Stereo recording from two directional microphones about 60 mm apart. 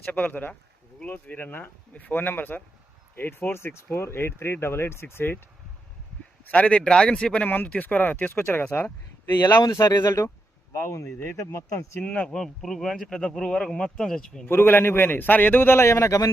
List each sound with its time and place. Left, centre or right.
0.0 s a man's voice: left
6.4 s speech: left
7.4 s a man's voice: left
9.7 s speech: left
12.0 s speech: left
12.3 s speech: centre
14.4 s a man's voice: left